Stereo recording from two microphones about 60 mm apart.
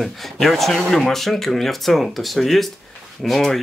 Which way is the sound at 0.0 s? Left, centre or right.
Centre.